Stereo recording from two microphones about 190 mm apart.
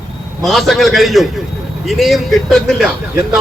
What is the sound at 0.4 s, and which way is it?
A man's voice, centre (ahead or behind).